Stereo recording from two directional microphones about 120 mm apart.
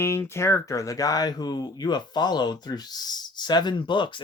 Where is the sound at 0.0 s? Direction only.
20° left (ahead or behind).